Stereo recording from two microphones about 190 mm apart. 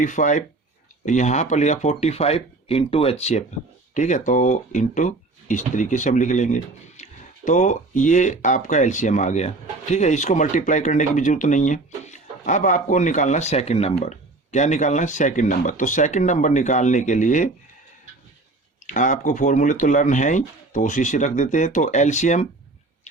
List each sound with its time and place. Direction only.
0.0 s speech: 40° left (ahead or behind)
18.9 s speech: 40° left (ahead or behind)